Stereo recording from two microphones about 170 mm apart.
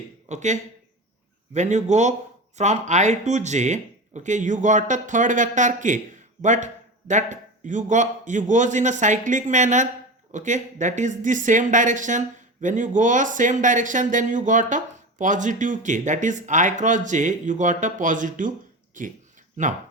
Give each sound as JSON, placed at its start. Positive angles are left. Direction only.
{"t": 0.3, "sound": "speech", "side_deg": -45}